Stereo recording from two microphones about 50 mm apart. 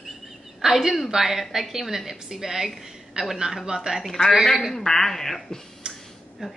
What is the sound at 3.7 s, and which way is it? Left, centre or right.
A woman's voice, centre.